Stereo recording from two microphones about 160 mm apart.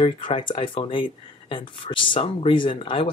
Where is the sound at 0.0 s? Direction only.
30° left (ahead or behind).